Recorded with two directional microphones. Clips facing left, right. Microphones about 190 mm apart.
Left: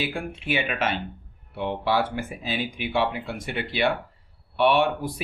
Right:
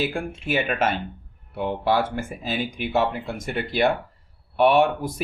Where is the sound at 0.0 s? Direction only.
45° right (ahead or behind).